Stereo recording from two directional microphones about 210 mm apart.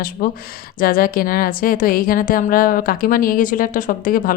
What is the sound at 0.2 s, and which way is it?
A woman's voice, 45° left (ahead or behind).